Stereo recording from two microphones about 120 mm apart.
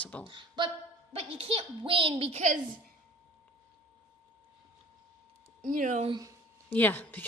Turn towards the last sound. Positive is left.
turn(degrees=15)  # may be behind; listen again after turning